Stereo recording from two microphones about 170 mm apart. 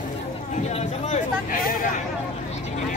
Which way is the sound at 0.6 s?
45° left (ahead or behind).